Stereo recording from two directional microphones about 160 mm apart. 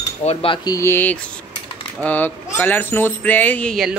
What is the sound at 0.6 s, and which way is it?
Speech, 20° left (ahead or behind).